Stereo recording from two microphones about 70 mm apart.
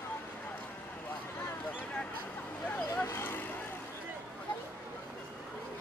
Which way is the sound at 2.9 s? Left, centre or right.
Left.